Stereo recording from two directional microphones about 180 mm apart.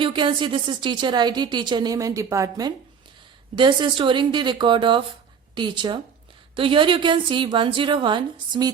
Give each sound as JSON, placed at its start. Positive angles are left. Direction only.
{"t": 0.0, "sound": "a woman's voice", "side_deg": -25}